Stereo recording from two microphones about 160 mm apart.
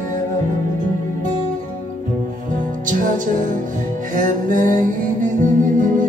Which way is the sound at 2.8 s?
55° right (ahead or behind).